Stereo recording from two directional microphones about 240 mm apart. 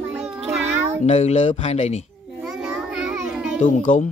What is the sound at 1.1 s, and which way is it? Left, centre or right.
Speech, left.